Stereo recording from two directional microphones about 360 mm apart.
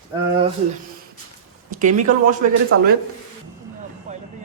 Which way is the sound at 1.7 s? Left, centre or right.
Right.